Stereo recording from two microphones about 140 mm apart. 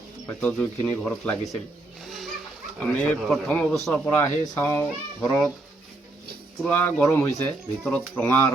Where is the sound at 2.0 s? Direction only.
Centre (ahead or behind).